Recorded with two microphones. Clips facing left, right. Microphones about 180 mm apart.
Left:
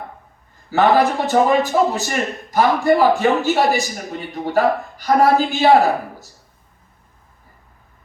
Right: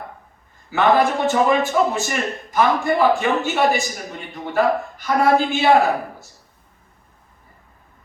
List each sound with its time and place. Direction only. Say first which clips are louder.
0.7 s a man's voice: left 2 dB; 40° left (ahead or behind)